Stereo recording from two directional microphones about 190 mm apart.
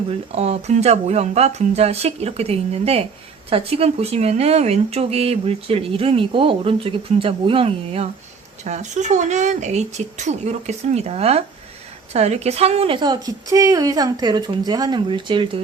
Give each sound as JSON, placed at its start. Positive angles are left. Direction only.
{"t": 0.3, "sound": "a woman's voice", "side_deg": -35}